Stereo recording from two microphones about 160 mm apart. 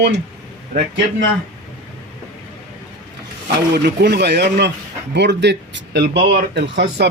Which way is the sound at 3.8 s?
90° right.